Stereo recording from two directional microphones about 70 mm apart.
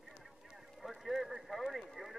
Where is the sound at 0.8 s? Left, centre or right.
Centre.